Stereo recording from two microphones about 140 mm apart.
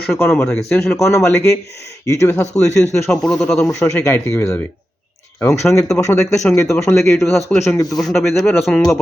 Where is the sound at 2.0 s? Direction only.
20° left (ahead or behind).